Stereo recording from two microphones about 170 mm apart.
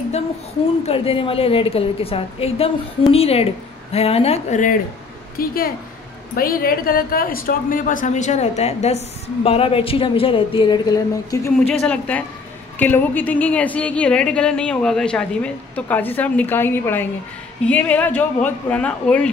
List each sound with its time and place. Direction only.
0.8 s a woman's voice: 35° left (ahead or behind)
5.4 s a woman's voice: 60° left (ahead or behind); by 11.5 s 20° left (ahead or behind)
11.8 s a woman's voice: 5° left (ahead or behind)